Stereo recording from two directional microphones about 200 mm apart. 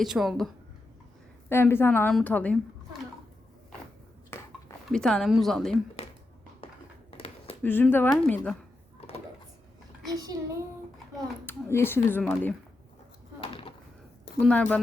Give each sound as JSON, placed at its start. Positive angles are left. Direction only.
{"t": 0.0, "sound": "a woman's voice", "side_deg": 0}
{"t": 1.5, "sound": "speech", "side_deg": 10}
{"t": 4.3, "sound": "a sound", "side_deg": 10}
{"t": 4.9, "sound": "a woman's voice", "side_deg": 5}
{"t": 6.6, "sound": "a sound", "side_deg": 30}
{"t": 7.6, "sound": "speech", "side_deg": 10}
{"t": 10.1, "sound": "a child's voice", "side_deg": -20}
{"t": 11.4, "sound": "speech", "side_deg": 10}
{"t": 13.4, "sound": "a sound", "side_deg": 25}
{"t": 14.4, "sound": "a woman's voice", "side_deg": 5}